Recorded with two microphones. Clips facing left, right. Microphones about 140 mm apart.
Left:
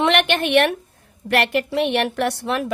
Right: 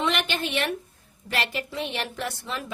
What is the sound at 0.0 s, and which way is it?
A woman's voice, 65° left (ahead or behind).